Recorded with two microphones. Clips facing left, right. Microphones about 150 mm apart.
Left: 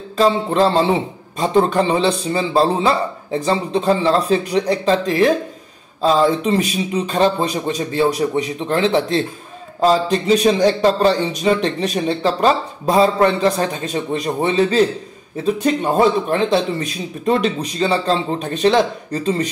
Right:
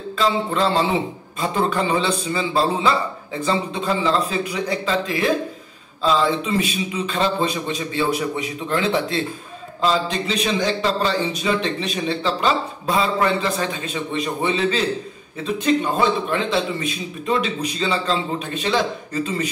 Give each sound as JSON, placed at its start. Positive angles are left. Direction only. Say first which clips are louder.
{"t": 0.2, "sound": "a man's voice", "louder": "left 5 dB", "side_deg": 40}